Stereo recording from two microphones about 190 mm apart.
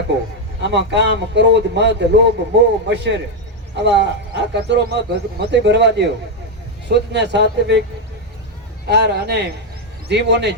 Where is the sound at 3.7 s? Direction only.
65° right (ahead or behind).